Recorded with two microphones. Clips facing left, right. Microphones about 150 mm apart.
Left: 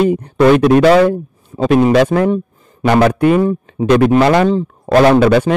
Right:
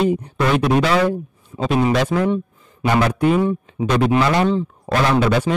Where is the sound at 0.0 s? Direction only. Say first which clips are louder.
Left 7 dB; 55° left (ahead or behind).